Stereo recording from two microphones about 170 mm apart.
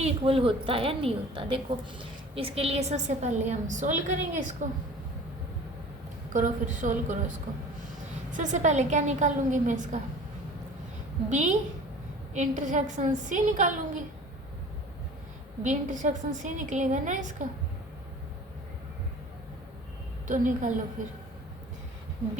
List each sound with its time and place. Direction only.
0.0 s a woman's voice: 35° right (ahead or behind)
6.3 s a woman's voice: 45° right (ahead or behind)
8.3 s a woman's voice: 45° right (ahead or behind)
11.3 s a woman's voice: 45° right (ahead or behind)
15.6 s a woman's voice: 45° right (ahead or behind)
20.2 s a woman's voice: 50° right (ahead or behind)